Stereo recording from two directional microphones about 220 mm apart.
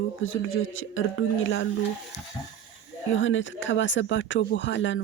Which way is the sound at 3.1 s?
60° left (ahead or behind).